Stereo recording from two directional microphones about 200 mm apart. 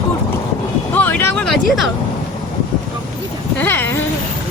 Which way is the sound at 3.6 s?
10° left (ahead or behind).